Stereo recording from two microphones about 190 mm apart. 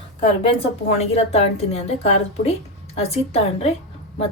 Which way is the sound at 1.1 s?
35° left (ahead or behind).